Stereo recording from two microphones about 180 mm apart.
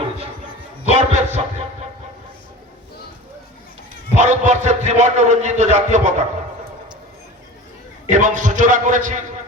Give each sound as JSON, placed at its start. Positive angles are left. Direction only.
{"t": 0.9, "sound": "a man's voice", "side_deg": -40}
{"t": 4.1, "sound": "a man's voice", "side_deg": -40}
{"t": 8.1, "sound": "a man's voice", "side_deg": -45}